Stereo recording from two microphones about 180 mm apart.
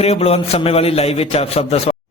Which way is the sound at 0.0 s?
35° left (ahead or behind).